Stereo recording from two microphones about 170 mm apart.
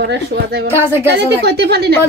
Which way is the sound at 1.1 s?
75° right (ahead or behind).